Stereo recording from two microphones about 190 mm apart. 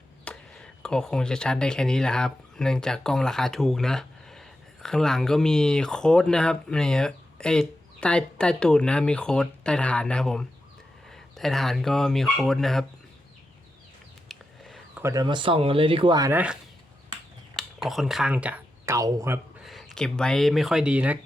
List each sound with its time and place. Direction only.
0.3 s speech: 5° left (ahead or behind)
14.3 s a sound: centre (ahead or behind)
15.0 s speech: 20° right (ahead or behind)
17.6 s speech: centre (ahead or behind)
19.5 s speech: centre (ahead or behind)